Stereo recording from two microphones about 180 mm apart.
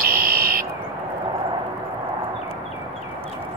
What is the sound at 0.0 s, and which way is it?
Fire alarm, 55° right (ahead or behind).